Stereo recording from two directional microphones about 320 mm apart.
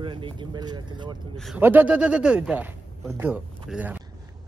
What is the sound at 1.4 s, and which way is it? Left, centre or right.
A man's voice, centre.